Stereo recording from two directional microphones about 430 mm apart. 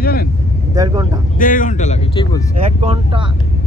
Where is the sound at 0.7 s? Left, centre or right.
Centre.